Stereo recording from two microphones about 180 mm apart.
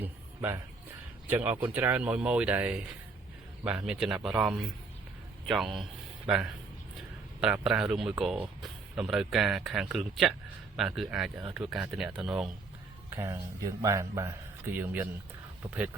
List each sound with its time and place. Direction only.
0.0 s music: 15° right (ahead or behind)
1.3 s speech: 10° right (ahead or behind)
13.1 s speech: 15° right (ahead or behind)